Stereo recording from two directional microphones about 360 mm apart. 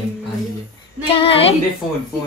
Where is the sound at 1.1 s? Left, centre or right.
Centre.